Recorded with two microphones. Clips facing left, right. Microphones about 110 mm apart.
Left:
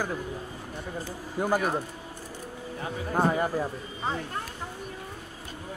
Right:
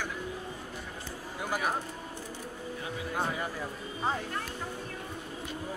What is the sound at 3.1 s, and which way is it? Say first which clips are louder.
Speech: left 9 dB; 45° left (ahead or behind).